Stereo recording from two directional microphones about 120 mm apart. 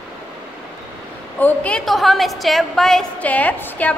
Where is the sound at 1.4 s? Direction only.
10° left (ahead or behind).